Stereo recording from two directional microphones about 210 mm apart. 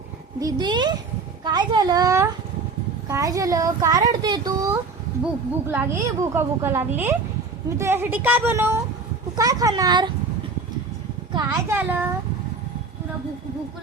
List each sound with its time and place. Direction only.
0.3 s a child's voice: 20° right (ahead or behind)
11.3 s a child's voice: 15° right (ahead or behind)